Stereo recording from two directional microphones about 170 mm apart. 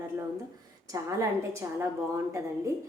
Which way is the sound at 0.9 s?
20° right (ahead or behind).